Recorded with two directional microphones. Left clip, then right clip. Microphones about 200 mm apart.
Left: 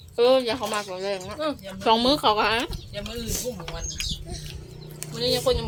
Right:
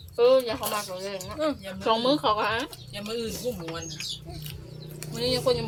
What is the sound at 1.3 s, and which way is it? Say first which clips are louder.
Speech: even; 5° right (ahead or behind).